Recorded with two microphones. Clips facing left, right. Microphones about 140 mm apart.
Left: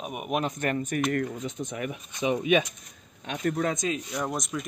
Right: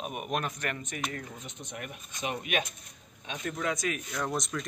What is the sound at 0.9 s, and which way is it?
Speech, 55° left (ahead or behind).